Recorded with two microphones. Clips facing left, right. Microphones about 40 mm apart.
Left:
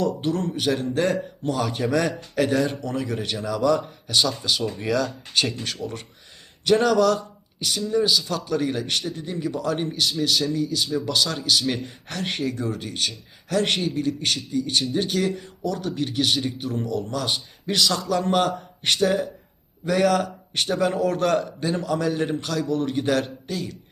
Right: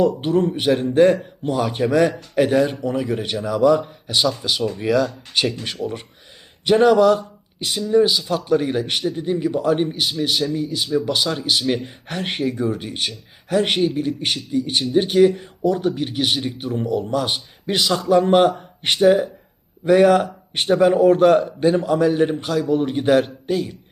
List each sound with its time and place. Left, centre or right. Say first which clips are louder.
0.2 s speech: right 6 dB; right